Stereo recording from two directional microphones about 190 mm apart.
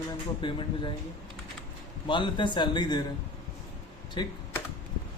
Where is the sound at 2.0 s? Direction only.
25° left (ahead or behind).